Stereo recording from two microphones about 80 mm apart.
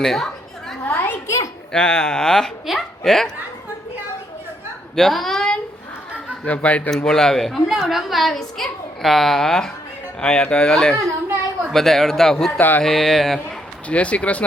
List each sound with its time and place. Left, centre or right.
0.0 s a woman's voice: centre
0.9 s a sound: left
1.7 s speech: centre
4.9 s a sound: centre
6.4 s speech: centre
6.9 s a woman's voice: centre
12.5 s speech: left
12.8 s a woman's voice: centre
13.8 s speech: centre